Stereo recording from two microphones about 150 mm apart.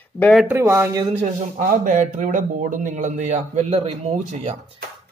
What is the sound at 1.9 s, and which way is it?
A man's voice, 60° right (ahead or behind).